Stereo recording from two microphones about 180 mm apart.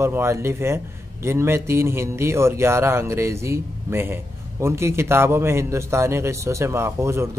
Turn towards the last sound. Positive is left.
turn(degrees=-15)  # may be behind; listen again after turning